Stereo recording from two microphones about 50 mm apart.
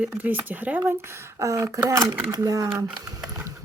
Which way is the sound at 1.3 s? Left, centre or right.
Right.